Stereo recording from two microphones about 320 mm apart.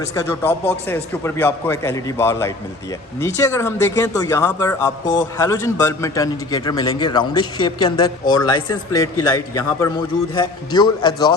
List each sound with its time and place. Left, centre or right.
0.1 s speech: centre